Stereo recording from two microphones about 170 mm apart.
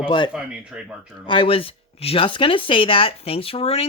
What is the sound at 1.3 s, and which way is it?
Speech, 30° left (ahead or behind).